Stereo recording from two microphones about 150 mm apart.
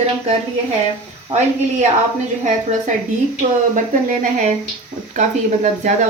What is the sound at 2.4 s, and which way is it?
Speech, 55° right (ahead or behind).